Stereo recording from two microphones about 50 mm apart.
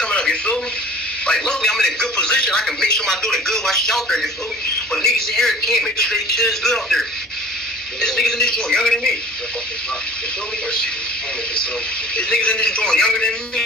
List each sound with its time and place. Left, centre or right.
0.0 s radio: centre
1.2 s a man's voice: centre
12.2 s speech: left